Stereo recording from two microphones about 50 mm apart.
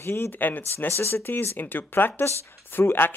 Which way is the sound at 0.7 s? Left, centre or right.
Left.